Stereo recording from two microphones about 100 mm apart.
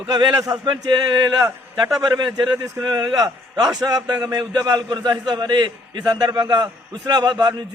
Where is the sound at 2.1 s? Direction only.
45° right (ahead or behind).